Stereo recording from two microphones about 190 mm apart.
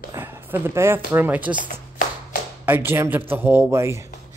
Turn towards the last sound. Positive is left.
turn(degrees=-15)  # may be behind; listen again after turning